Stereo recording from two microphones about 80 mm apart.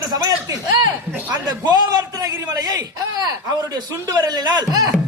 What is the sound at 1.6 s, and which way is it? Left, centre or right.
A man's voice, right.